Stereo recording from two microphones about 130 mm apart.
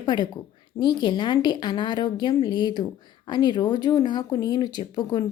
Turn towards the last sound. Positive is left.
turn(degrees=35)  # may be behind; listen again after turning